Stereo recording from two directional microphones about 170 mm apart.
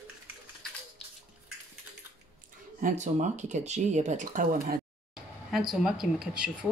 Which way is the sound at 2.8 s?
45° right (ahead or behind).